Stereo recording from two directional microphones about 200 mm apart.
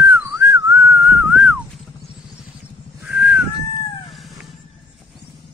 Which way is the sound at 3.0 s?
5° right (ahead or behind).